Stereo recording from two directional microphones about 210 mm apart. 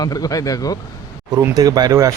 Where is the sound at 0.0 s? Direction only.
15° left (ahead or behind).